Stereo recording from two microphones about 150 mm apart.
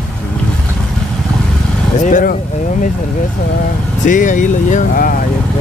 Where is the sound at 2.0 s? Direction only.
60° left (ahead or behind).